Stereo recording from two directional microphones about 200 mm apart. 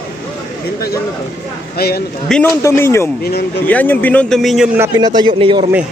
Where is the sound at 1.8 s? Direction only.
50° left (ahead or behind).